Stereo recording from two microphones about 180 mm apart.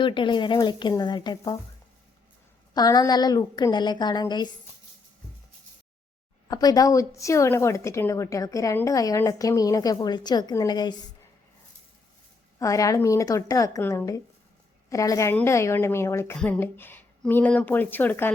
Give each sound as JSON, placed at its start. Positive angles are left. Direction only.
{"t": 0.0, "sound": "a woman's voice", "side_deg": 25}
{"t": 2.7, "sound": "a woman's voice", "side_deg": 20}
{"t": 6.5, "sound": "a woman's voice", "side_deg": 20}
{"t": 12.5, "sound": "a woman's voice", "side_deg": 20}